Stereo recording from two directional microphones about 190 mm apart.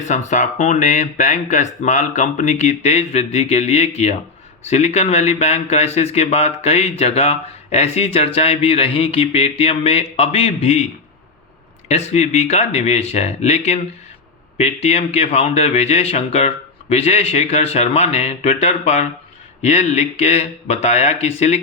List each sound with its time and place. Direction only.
0.0 s speech: 40° left (ahead or behind)
11.9 s speech: 35° left (ahead or behind)